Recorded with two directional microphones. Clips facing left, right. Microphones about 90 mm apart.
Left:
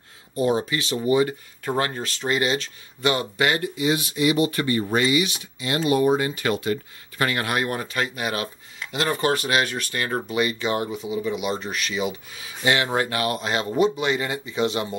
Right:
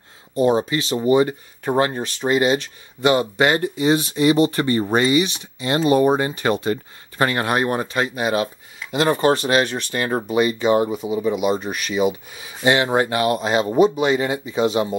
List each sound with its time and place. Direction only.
0.4 s speech: 30° right (ahead or behind)
10.9 s speech: 40° right (ahead or behind)
11.5 s speech: 15° right (ahead or behind)